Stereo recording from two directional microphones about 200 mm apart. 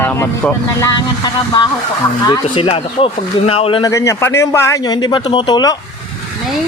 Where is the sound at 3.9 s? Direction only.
15° left (ahead or behind).